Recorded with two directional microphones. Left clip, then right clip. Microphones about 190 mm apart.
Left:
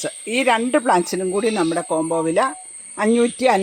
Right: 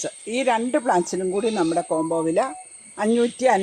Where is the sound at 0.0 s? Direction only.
35° left (ahead or behind).